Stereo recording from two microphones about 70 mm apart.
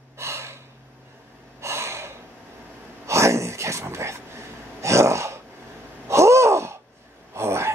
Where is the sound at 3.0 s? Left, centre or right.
Right.